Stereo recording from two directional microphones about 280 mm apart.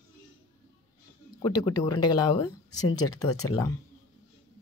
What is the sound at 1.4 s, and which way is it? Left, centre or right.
Speech, centre.